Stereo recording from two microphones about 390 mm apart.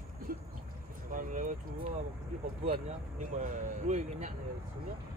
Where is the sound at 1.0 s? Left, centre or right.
Centre.